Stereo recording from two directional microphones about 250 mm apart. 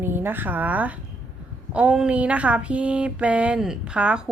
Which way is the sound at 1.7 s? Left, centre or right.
Centre.